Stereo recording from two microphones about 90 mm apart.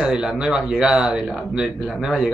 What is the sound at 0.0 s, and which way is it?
Speech, 10° right (ahead or behind).